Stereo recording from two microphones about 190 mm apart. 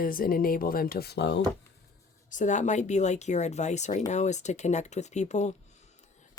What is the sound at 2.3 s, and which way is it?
Speech, 40° left (ahead or behind).